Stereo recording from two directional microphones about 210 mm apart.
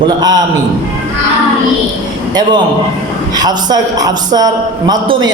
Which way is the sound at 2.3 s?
20° right (ahead or behind).